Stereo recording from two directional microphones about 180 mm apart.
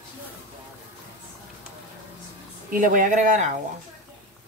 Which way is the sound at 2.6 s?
50° right (ahead or behind).